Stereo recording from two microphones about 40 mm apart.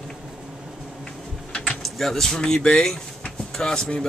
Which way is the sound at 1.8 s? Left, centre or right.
Centre.